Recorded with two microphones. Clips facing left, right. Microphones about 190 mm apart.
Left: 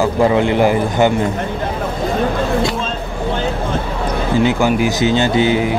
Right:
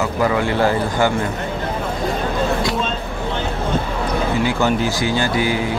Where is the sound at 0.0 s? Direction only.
25° left (ahead or behind).